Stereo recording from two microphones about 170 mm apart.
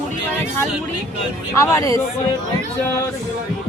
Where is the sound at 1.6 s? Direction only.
20° left (ahead or behind).